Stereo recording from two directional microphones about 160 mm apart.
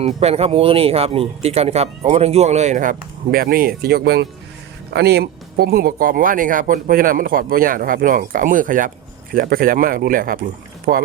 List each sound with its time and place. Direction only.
0.0 s speech: 40° right (ahead or behind)
3.3 s speech: 65° right (ahead or behind)